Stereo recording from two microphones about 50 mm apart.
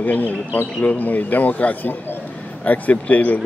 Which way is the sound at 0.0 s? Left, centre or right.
Left.